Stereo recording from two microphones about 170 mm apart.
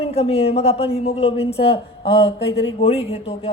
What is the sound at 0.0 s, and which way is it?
A man's voice, 35° left (ahead or behind).